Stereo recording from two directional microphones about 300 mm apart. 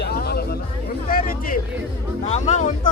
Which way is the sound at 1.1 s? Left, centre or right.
Left.